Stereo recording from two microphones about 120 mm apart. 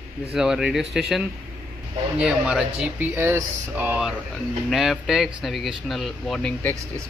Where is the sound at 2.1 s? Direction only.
5° right (ahead or behind).